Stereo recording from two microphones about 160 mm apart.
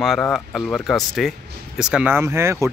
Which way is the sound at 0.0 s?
Centre (ahead or behind).